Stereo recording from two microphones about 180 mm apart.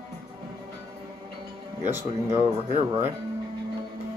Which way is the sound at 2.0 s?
40° right (ahead or behind).